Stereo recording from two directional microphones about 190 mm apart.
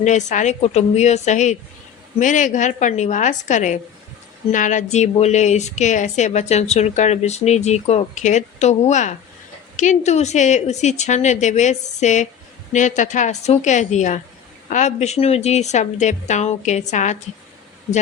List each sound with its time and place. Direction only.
0.0 s a woman's voice: 40° left (ahead or behind)